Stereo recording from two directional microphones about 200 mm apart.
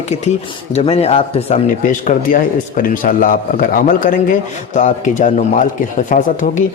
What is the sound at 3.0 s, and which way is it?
A man's voice, 45° left (ahead or behind).